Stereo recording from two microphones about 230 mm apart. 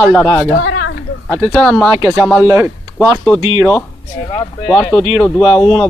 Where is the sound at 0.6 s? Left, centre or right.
Left.